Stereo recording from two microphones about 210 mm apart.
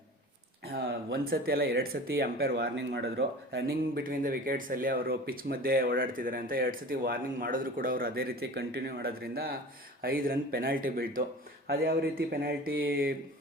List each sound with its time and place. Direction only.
0.6 s speech: 50° right (ahead or behind)